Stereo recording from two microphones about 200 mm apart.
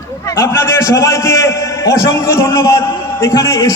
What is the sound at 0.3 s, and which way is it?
A man's voice, 15° left (ahead or behind).